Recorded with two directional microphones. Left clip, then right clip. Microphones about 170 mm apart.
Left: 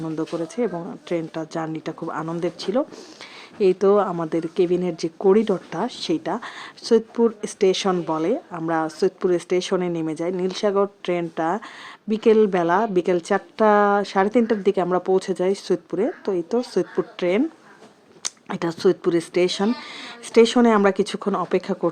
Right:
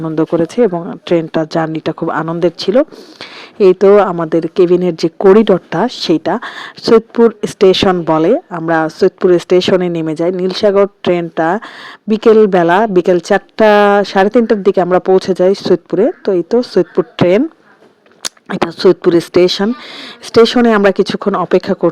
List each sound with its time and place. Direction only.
0.0 s speech: 45° right (ahead or behind)